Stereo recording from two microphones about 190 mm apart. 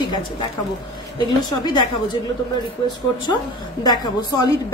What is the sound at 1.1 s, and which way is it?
A woman's voice, 20° left (ahead or behind).